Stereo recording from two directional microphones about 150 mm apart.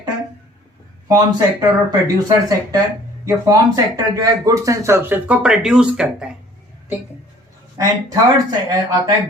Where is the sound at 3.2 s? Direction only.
25° right (ahead or behind); by 6.3 s 5° right (ahead or behind).